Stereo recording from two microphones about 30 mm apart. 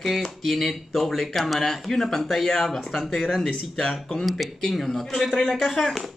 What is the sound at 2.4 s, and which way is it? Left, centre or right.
A man's voice, centre.